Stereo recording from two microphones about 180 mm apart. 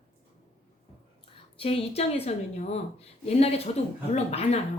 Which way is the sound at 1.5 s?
30° left (ahead or behind).